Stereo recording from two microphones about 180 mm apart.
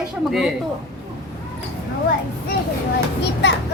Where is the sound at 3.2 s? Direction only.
75° left (ahead or behind).